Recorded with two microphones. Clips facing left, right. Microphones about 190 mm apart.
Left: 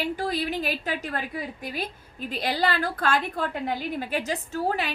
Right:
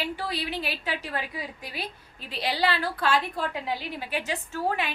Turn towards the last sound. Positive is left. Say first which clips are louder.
# left 2 dB
turn(degrees=35)  # may be behind; listen again after turning